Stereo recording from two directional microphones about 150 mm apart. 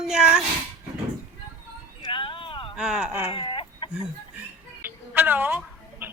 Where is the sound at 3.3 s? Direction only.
35° left (ahead or behind).